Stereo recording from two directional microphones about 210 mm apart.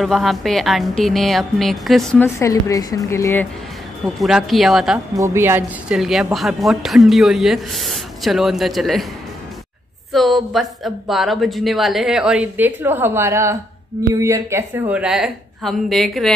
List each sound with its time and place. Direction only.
0.0 s a woman's voice: centre (ahead or behind)
4.2 s a woman's voice: centre (ahead or behind)
5.1 s a woman's voice: 15° right (ahead or behind)
10.1 s a woman's voice: centre (ahead or behind)